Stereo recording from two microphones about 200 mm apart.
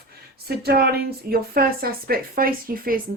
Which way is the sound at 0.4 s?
50° right (ahead or behind).